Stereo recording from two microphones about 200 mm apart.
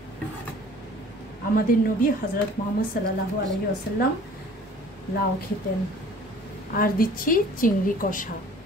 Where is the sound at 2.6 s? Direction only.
40° left (ahead or behind).